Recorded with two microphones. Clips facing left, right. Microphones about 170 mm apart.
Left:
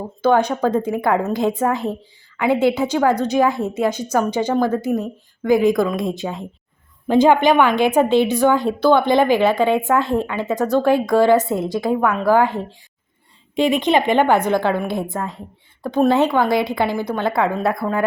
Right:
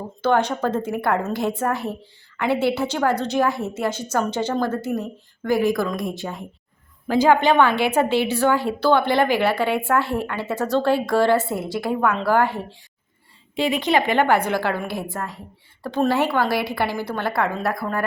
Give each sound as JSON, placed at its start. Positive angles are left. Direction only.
{"t": 0.2, "sound": "a woman's voice", "side_deg": 10}